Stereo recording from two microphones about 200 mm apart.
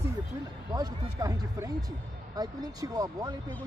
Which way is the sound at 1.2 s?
20° right (ahead or behind).